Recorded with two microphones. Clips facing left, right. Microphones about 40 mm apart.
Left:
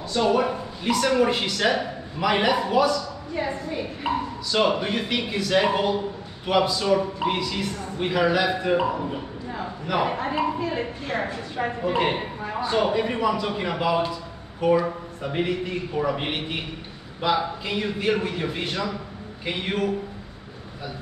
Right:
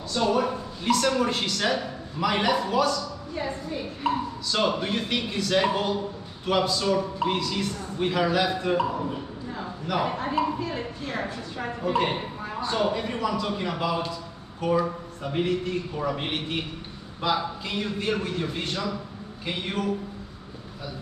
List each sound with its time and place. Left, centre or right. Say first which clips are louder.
0.1 s a woman's voice: left 2 dB; centre